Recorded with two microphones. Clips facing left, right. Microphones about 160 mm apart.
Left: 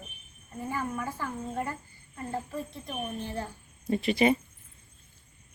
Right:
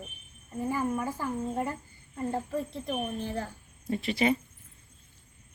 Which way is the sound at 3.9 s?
15° left (ahead or behind).